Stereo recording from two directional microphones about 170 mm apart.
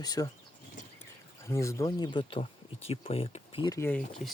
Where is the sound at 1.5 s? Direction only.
20° left (ahead or behind); by 3.7 s 35° left (ahead or behind).